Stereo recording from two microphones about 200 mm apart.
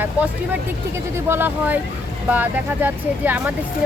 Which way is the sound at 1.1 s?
10° right (ahead or behind).